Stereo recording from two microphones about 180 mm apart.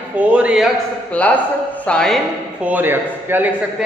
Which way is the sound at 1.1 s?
10° left (ahead or behind).